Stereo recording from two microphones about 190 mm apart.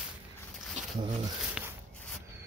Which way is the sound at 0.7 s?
30° right (ahead or behind).